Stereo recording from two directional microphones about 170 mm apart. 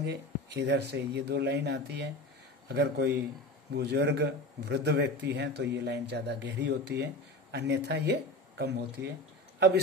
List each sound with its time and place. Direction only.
0.0 s speech: 80° right
9.0 s speech: 10° right (ahead or behind)